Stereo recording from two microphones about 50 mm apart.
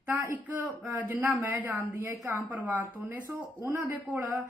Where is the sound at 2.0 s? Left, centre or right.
Right.